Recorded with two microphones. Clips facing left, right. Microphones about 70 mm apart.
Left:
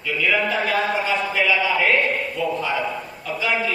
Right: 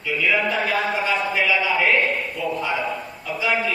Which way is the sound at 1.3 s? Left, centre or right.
Centre.